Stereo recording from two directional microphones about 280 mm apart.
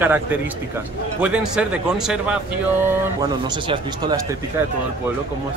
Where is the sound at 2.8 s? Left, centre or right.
Centre.